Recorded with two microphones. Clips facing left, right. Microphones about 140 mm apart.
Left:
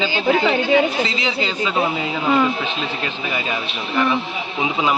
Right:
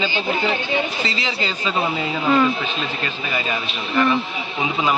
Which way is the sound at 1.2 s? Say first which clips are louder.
Left 3 dB; 10° left (ahead or behind).